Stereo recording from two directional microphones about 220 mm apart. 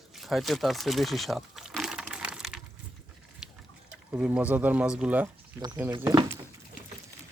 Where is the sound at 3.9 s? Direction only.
5° right (ahead or behind).